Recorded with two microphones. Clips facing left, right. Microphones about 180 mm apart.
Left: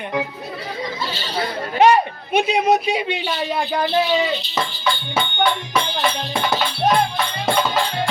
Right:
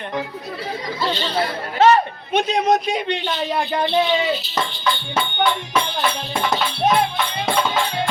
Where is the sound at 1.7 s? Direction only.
15° left (ahead or behind).